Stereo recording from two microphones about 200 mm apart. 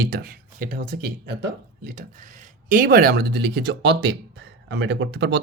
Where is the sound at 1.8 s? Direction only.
40° right (ahead or behind).